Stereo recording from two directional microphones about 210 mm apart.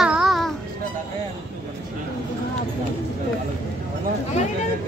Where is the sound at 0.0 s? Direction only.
Centre (ahead or behind).